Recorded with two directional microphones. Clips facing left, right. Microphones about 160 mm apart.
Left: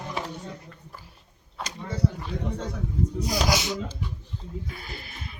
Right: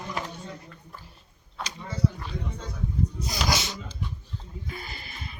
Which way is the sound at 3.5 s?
15° left (ahead or behind).